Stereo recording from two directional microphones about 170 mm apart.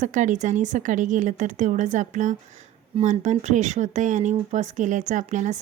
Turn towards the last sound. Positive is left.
turn(degrees=-45)  # may be behind; listen again after turning